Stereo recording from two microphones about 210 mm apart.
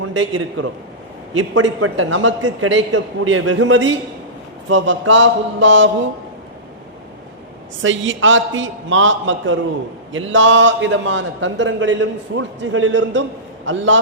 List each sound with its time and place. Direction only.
0.0 s a man's voice: 70° right (ahead or behind)
7.8 s a man's voice: 65° right (ahead or behind)